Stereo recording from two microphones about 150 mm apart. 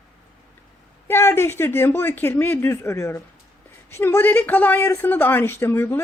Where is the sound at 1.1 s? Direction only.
15° left (ahead or behind).